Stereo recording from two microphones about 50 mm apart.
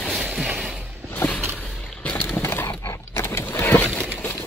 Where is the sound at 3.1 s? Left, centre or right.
Left.